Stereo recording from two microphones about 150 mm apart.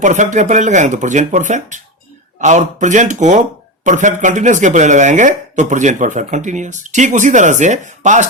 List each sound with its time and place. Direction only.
0.0 s speech: 55° right (ahead or behind)